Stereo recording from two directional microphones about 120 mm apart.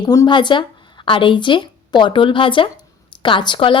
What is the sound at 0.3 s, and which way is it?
A woman's voice, 40° left (ahead or behind).